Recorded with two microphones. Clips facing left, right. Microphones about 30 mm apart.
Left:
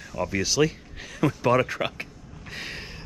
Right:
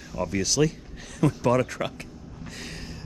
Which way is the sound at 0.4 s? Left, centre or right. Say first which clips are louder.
Left 1 dB; centre.